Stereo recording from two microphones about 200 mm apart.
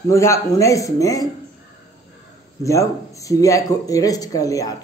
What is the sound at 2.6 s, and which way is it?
A man's voice, 15° left (ahead or behind).